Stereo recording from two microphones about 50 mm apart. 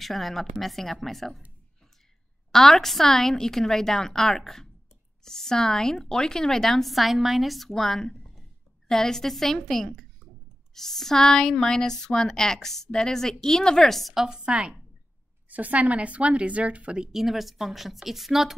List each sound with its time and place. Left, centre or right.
0.0 s a woman's voice: centre
2.5 s a woman's voice: centre
14.2 s a woman's voice: centre
17.0 s a woman's voice: centre